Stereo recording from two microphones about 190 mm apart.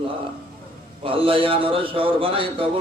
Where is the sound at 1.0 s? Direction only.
30° right (ahead or behind).